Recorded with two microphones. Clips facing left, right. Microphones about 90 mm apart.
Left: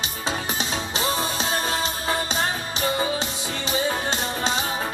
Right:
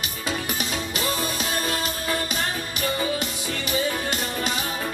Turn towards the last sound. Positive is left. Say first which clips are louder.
# left 2 dB
turn(degrees=25)  # may be behind; listen again after turning